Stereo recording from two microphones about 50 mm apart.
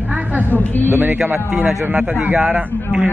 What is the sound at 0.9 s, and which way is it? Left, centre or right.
A man's voice, right.